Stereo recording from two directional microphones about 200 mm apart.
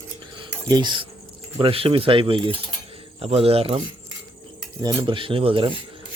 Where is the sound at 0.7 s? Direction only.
20° right (ahead or behind).